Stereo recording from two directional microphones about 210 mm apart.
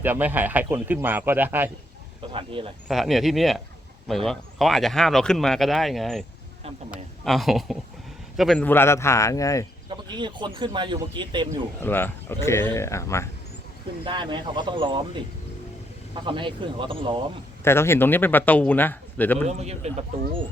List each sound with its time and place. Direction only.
0.0 s speech: 10° right (ahead or behind)
2.3 s speech: 25° right (ahead or behind)
2.8 s speech: centre (ahead or behind); by 9.6 s 15° left (ahead or behind)
10.1 s speech: 20° right (ahead or behind)
11.8 s speech: 10° left (ahead or behind)
14.0 s speech: 20° right (ahead or behind)
16.2 s speech: 25° right (ahead or behind)
17.6 s speech: 10° left (ahead or behind)
19.5 s speech: 30° right (ahead or behind)